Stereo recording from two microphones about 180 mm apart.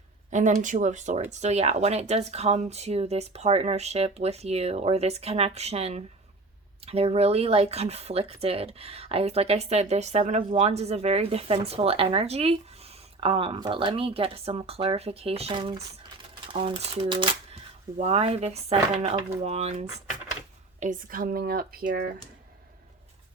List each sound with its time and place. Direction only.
0.3 s speech: 45° right (ahead or behind)